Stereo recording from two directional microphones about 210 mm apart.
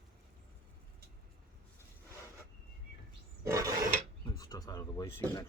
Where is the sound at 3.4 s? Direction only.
15° right (ahead or behind).